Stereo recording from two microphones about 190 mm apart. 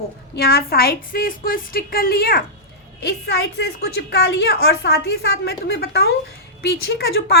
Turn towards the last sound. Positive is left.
turn(degrees=55)  # may be behind; listen again after turning